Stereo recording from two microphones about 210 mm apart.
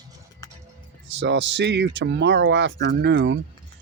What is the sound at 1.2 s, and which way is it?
Speech, 60° right (ahead or behind).